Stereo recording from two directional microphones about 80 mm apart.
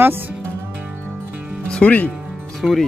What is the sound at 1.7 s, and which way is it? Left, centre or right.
Speech, centre.